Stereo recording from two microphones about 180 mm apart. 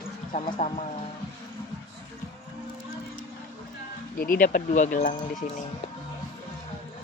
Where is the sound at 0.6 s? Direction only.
35° left (ahead or behind).